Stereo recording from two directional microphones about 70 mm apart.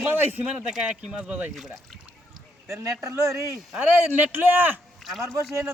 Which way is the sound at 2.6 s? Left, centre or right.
Right.